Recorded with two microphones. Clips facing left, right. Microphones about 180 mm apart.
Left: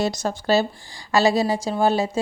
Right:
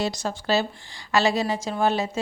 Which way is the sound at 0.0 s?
45° left (ahead or behind).